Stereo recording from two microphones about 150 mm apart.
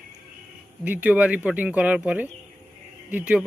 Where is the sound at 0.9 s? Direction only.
10° right (ahead or behind).